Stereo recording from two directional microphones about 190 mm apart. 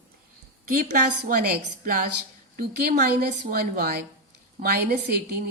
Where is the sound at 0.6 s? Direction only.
45° right (ahead or behind).